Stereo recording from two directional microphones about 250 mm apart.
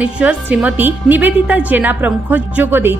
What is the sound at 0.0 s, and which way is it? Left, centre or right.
A woman's voice, centre.